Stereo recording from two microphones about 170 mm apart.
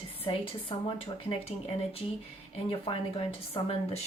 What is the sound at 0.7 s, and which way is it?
Speech, 35° left (ahead or behind).